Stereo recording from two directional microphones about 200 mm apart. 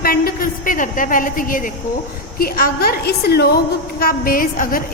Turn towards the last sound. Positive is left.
turn(degrees=45)  # may be behind; listen again after turning